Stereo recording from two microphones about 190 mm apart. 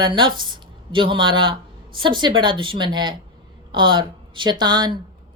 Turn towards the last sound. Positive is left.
turn(degrees=-20)  # may be behind; listen again after turning